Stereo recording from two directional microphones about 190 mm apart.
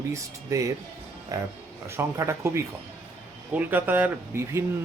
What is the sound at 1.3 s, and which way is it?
Speech, 20° right (ahead or behind).